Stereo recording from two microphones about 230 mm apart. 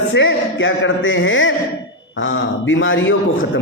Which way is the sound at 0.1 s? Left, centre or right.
Left.